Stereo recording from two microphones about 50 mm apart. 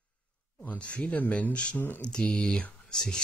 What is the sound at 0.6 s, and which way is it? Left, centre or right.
Speech, left.